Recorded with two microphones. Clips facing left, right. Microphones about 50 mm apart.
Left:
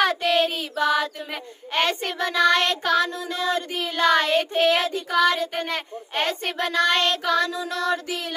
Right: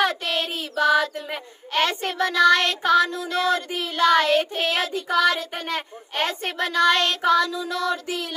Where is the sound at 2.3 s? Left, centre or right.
Left.